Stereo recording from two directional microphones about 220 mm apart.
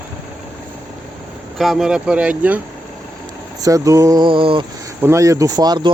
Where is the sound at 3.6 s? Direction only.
15° right (ahead or behind).